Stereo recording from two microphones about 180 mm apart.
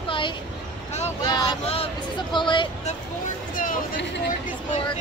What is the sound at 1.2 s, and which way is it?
Vehicle, 20° left (ahead or behind).